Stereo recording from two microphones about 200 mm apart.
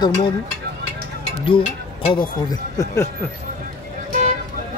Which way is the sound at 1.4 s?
30° left (ahead or behind).